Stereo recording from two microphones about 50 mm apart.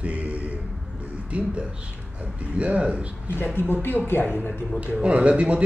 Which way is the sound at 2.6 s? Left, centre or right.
Right.